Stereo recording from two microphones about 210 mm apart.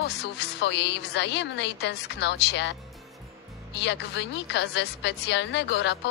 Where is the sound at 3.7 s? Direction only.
55° left (ahead or behind).